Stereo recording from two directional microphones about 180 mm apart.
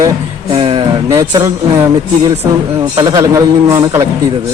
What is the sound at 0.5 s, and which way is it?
Speech, 30° right (ahead or behind).